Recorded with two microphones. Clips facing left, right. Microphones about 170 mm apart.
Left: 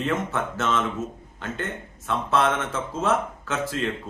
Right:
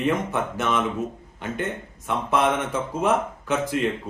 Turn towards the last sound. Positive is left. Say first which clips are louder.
# right 4 dB
turn(degrees=-15)  # may be behind; listen again after turning